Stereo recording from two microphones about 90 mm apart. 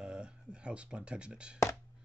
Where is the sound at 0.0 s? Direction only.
10° right (ahead or behind).